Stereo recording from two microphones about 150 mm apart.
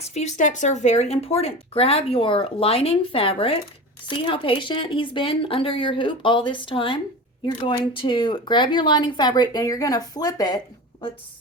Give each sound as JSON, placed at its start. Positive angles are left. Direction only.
{"t": 0.0, "sound": "speech", "side_deg": 50}